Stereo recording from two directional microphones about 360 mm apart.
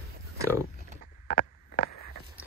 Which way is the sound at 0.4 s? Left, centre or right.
Centre.